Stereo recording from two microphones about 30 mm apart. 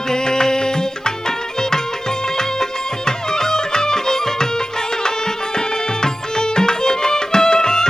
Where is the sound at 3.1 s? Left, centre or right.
Centre.